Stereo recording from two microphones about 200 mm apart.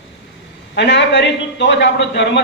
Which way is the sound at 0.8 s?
60° left (ahead or behind).